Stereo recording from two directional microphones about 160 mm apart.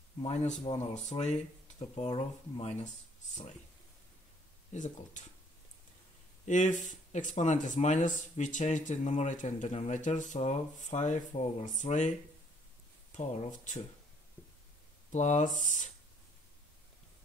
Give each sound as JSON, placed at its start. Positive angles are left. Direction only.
{"t": 0.2, "sound": "speech", "side_deg": 45}
{"t": 4.7, "sound": "speech", "side_deg": 50}
{"t": 6.4, "sound": "speech", "side_deg": 50}
{"t": 13.1, "sound": "speech", "side_deg": 50}
{"t": 15.1, "sound": "speech", "side_deg": 50}